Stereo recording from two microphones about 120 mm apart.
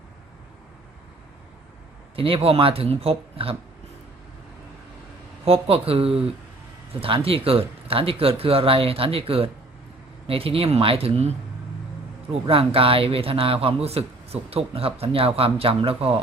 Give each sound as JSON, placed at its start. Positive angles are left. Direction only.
{"t": 2.1, "sound": "a man's voice", "side_deg": -50}
{"t": 5.5, "sound": "a man's voice", "side_deg": -50}